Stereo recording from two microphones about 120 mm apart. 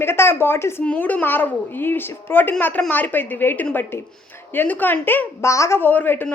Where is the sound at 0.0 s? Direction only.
20° left (ahead or behind).